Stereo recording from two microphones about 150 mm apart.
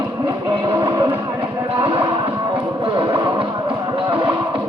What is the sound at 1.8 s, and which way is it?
Music, 35° right (ahead or behind).